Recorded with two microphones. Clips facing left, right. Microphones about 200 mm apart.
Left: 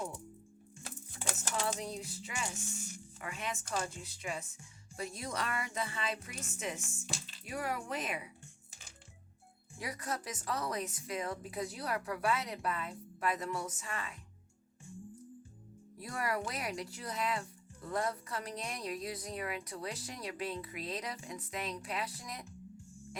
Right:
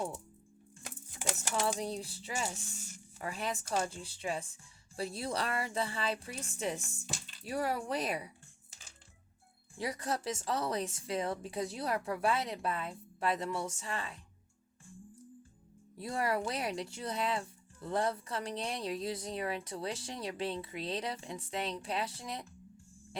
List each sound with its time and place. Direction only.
0.9 s a sound: 15° right (ahead or behind)
1.8 s speech: 30° right (ahead or behind)
9.7 s speech: 30° right (ahead or behind)
16.0 s speech: 30° right (ahead or behind)